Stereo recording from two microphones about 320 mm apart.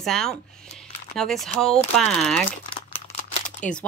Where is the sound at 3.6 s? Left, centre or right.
Centre.